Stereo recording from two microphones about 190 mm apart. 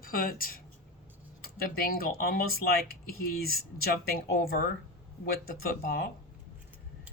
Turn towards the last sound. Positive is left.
turn(degrees=55)  # may be behind; listen again after turning